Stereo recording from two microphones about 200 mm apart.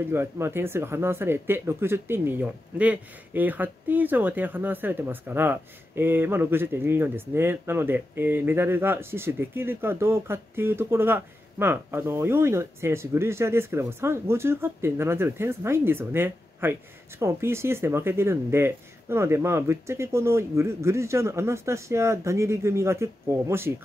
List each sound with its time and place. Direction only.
0.1 s speech: 10° right (ahead or behind)